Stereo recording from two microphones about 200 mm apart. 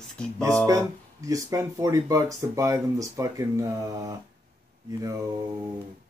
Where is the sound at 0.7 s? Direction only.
15° right (ahead or behind).